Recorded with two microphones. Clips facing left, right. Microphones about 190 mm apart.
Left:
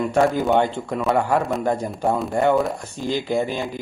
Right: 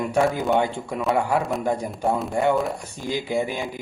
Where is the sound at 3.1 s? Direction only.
10° right (ahead or behind).